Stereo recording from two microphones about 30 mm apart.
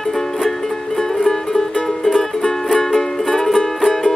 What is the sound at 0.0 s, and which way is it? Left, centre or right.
Music, centre.